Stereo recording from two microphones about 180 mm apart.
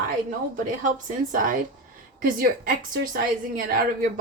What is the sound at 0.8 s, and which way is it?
Speech, 50° right (ahead or behind).